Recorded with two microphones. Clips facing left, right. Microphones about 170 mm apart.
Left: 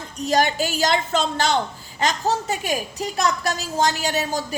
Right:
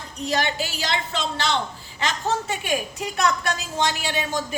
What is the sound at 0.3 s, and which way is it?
A woman's voice, 45° left (ahead or behind).